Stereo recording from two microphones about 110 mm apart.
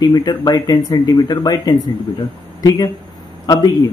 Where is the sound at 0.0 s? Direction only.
40° left (ahead or behind).